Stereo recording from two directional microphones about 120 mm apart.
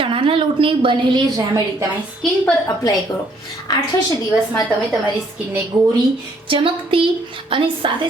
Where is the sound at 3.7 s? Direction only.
35° left (ahead or behind).